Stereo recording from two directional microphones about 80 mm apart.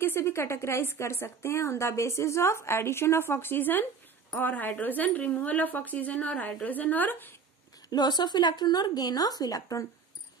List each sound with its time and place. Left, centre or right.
0.0 s a woman's voice: left
7.9 s speech: left